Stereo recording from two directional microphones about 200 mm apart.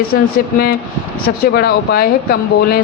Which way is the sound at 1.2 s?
50° left (ahead or behind).